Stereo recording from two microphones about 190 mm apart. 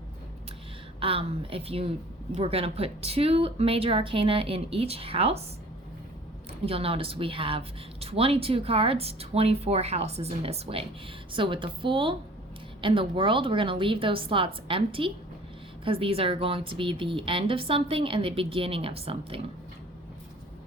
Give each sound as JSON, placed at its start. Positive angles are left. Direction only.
{"t": 0.9, "sound": "a woman's voice", "side_deg": -30}
{"t": 6.7, "sound": "a woman's voice", "side_deg": -30}